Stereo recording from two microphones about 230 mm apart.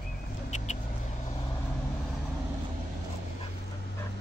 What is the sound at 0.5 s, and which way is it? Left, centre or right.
Vehicle, left.